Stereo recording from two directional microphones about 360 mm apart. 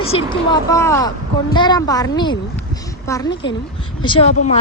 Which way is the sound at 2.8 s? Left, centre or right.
Centre.